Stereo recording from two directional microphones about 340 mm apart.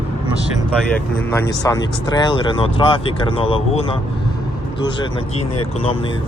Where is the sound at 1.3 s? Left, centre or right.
Centre.